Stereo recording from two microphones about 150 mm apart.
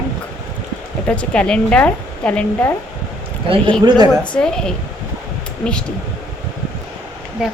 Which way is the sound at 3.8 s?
30° right (ahead or behind).